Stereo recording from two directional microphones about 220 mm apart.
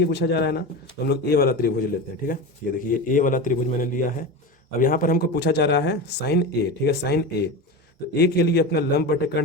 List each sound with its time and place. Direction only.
0.0 s a man's voice: 50° left (ahead or behind)
2.8 s a man's voice: 35° left (ahead or behind)